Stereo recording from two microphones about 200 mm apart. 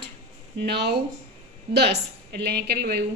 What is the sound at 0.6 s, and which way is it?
A woman's voice, 55° right (ahead or behind).